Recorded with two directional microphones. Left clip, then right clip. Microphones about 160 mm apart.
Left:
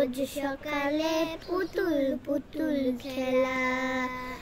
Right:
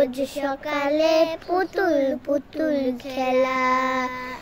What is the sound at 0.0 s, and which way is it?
Child singing, 20° left (ahead or behind).